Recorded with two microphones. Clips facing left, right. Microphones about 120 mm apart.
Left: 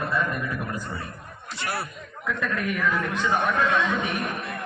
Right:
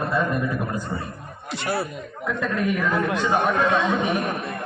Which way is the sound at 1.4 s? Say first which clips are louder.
Right 5 dB; 70° right (ahead or behind).